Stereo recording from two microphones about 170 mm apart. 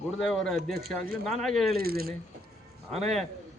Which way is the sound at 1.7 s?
65° right (ahead or behind).